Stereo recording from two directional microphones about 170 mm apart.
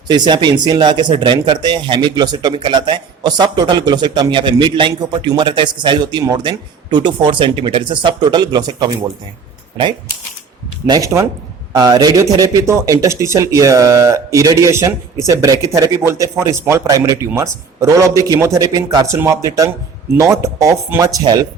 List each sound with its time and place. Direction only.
0.1 s speech: 25° right (ahead or behind)
10.8 s speech: 20° right (ahead or behind)